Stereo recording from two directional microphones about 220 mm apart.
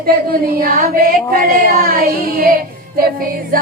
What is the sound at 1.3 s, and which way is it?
Speech, 40° right (ahead or behind).